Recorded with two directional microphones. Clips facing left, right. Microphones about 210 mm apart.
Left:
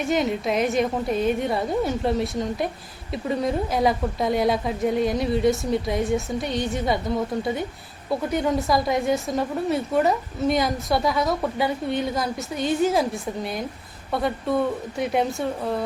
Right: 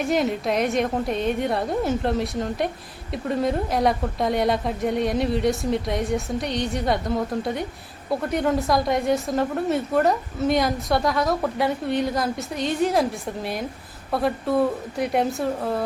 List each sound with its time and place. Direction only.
0.0 s a woman's voice: centre (ahead or behind)
8.1 s a woman's voice: centre (ahead or behind)